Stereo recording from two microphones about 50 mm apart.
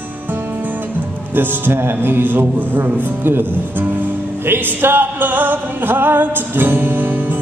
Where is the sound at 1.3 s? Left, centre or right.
Right.